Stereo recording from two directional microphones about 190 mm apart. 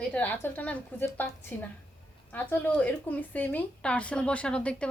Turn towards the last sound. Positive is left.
turn(degrees=5)  # may be behind; listen again after turning